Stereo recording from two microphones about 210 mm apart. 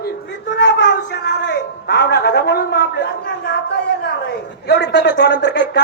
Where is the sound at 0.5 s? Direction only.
55° left (ahead or behind).